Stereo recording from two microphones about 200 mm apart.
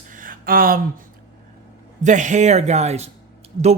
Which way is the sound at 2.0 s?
40° right (ahead or behind).